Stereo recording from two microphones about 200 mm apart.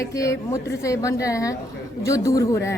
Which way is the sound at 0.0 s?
15° left (ahead or behind).